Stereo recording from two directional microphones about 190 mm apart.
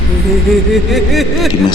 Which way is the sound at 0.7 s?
Centre (ahead or behind).